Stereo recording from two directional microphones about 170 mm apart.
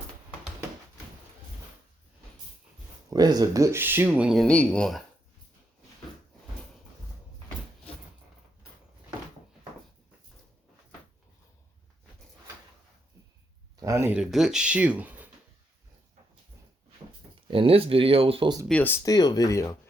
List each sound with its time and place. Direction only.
3.1 s speech: 20° right (ahead or behind); by 5.0 s centre (ahead or behind)
13.7 s a sound: 20° right (ahead or behind)
14.2 s speech: centre (ahead or behind)
17.5 s speech: 35° right (ahead or behind)
18.7 s speech: 10° left (ahead or behind)
19.0 s speech: 20° left (ahead or behind)